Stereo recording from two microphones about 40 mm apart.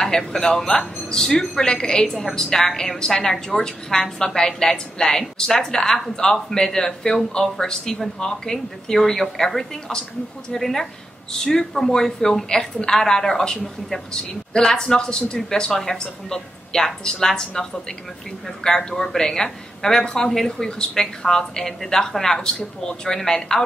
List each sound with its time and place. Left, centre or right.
0.3 s speech: centre
2.0 s speech: centre